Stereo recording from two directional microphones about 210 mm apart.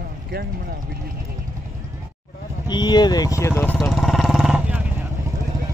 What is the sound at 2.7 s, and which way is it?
Speech, 20° left (ahead or behind).